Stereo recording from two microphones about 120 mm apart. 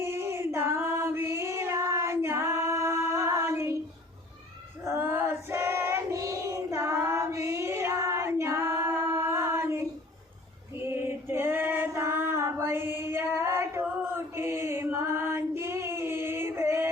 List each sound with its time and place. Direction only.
0.0 s female singing: 20° right (ahead or behind)
4.8 s child singing: 20° right (ahead or behind)
10.8 s female singing: 20° right (ahead or behind)